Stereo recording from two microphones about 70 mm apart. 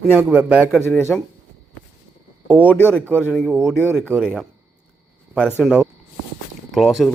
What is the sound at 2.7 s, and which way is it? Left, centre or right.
Speech, left.